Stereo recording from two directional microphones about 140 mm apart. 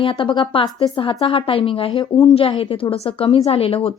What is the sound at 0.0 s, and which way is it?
A woman's voice, 35° left (ahead or behind).